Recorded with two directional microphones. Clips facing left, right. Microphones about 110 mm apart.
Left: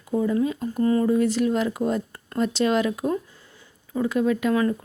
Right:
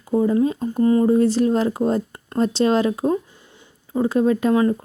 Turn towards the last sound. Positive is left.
turn(degrees=-30)  # may be behind; listen again after turning